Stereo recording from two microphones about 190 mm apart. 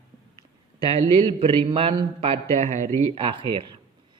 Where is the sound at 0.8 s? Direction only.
30° right (ahead or behind).